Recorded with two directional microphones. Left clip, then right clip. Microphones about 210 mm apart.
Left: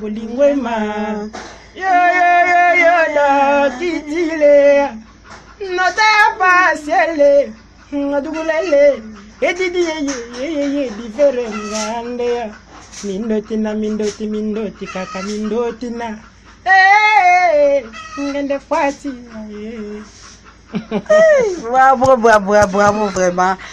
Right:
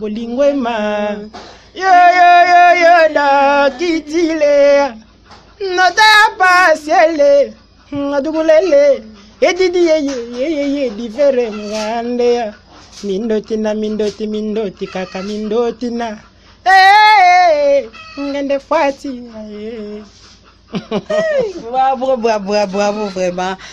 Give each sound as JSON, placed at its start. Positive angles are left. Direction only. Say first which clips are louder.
{"t": 0.0, "sound": "speech", "louder": "right 1 dB", "side_deg": -55}
{"t": 1.8, "sound": "a sound", "louder": "right 5 dB", "side_deg": -50}
{"t": 5.6, "sound": "child singing", "louder": "right 4 dB", "side_deg": -50}
{"t": 7.9, "sound": "speech", "louder": "right 2 dB", "side_deg": -55}
{"t": 16.6, "sound": "child singing", "louder": "right 3 dB", "side_deg": -50}
{"t": 18.3, "sound": "speech", "louder": "right 4 dB", "side_deg": -50}
{"t": 20.7, "sound": "speech", "louder": "left 4 dB", "side_deg": -50}
{"t": 21.6, "sound": "a man's voice", "louder": "left 4 dB", "side_deg": 10}
{"t": 22.0, "sound": "a man's voice", "louder": "left 4 dB", "side_deg": -10}
{"t": 23.2, "sound": "speech", "louder": "left 4 dB", "side_deg": -25}